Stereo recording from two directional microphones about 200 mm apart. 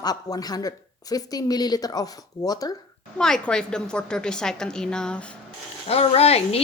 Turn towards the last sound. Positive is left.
turn(degrees=30)  # may be behind; listen again after turning